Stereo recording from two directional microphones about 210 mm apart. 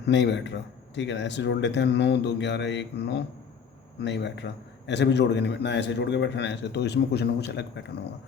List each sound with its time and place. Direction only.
0.0 s speech: 55° left (ahead or behind)